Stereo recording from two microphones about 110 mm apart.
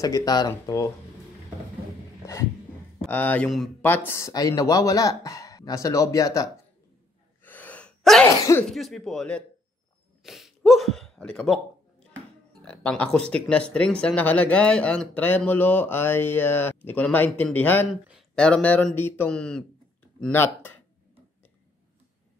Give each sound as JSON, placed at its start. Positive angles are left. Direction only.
{"t": 0.0, "sound": "speech", "side_deg": 35}
{"t": 3.1, "sound": "speech", "side_deg": 15}
{"t": 3.4, "sound": "speech", "side_deg": 0}
{"t": 3.8, "sound": "speech", "side_deg": 20}
{"t": 4.3, "sound": "speech", "side_deg": 35}
{"t": 7.4, "sound": "gasp", "side_deg": 15}
{"t": 8.0, "sound": "cough", "side_deg": 0}
{"t": 8.6, "sound": "speech", "side_deg": 0}
{"t": 12.6, "sound": "speech", "side_deg": 10}
{"t": 19.3, "sound": "speech", "side_deg": 10}